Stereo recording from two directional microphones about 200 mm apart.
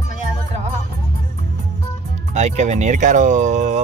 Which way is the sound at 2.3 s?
35° right (ahead or behind).